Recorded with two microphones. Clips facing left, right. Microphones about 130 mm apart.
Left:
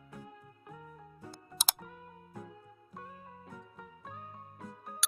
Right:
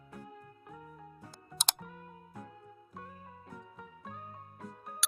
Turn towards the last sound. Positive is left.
turn(degrees=0)  # may be behind; listen again after turning